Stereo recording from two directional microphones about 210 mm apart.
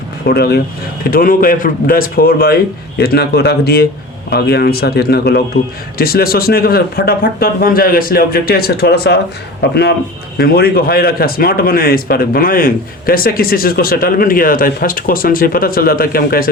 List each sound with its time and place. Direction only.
0.3 s a man's voice: 50° left (ahead or behind)
10.3 s a man's voice: 50° left (ahead or behind)